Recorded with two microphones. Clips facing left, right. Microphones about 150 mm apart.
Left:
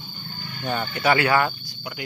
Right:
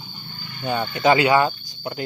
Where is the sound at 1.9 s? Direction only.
30° right (ahead or behind).